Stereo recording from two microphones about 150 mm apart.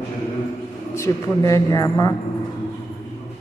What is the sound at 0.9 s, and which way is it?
Speech, 20° left (ahead or behind).